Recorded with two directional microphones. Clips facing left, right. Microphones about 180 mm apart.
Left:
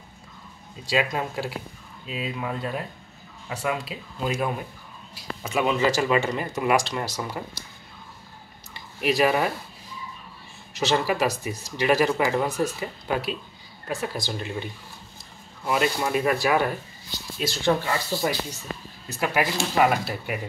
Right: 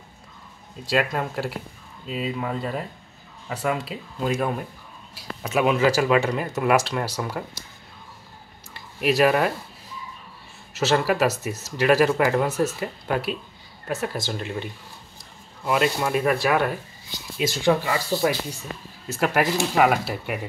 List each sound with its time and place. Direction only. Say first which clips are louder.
0.8 s speech: right 2 dB; centre (ahead or behind)
9.0 s speech: right 2 dB; 5° right (ahead or behind)
10.7 s speech: right 2 dB; 5° right (ahead or behind)
17.4 s speech: right 3 dB; 15° right (ahead or behind)
19.0 s speech: right 3 dB; 5° right (ahead or behind)